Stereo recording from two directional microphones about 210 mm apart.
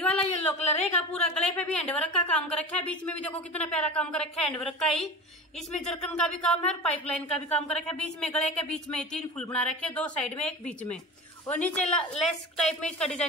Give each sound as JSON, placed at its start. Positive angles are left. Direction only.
{"t": 0.2, "sound": "a sound", "side_deg": 30}
{"t": 1.2, "sound": "a woman's voice", "side_deg": 5}
{"t": 7.3, "sound": "speech", "side_deg": 30}
{"t": 7.6, "sound": "a woman's voice", "side_deg": 5}